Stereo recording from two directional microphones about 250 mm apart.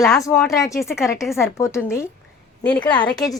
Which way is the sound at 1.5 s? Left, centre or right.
Centre.